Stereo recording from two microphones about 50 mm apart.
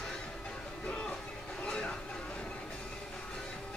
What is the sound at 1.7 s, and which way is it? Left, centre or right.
Vehicle, left.